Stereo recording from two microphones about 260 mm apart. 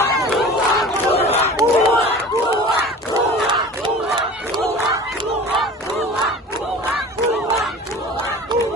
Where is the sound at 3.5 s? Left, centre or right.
Centre.